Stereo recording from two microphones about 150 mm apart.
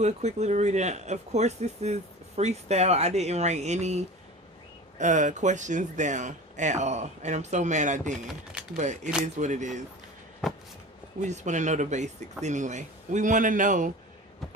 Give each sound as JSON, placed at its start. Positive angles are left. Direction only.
{"t": 0.0, "sound": "speech", "side_deg": -50}
{"t": 11.2, "sound": "speech", "side_deg": -50}